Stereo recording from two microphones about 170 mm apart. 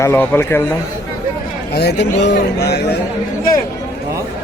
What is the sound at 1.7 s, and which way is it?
Speech, 75° left (ahead or behind).